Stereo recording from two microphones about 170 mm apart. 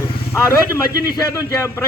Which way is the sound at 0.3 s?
15° left (ahead or behind).